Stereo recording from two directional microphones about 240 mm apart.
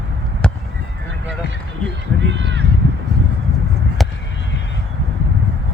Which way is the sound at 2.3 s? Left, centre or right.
Right.